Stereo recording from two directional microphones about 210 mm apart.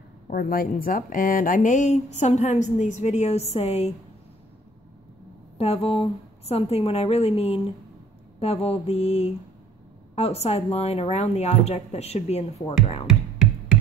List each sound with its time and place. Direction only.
0.3 s speech: 45° left (ahead or behind)
5.6 s a woman's voice: 30° left (ahead or behind)